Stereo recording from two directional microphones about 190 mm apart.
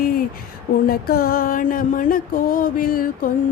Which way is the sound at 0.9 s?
50° left (ahead or behind).